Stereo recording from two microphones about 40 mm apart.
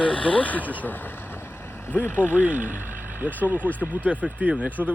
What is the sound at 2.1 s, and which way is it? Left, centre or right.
Speech, left.